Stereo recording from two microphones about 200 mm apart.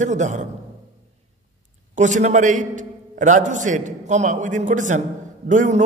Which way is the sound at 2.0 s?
40° right (ahead or behind).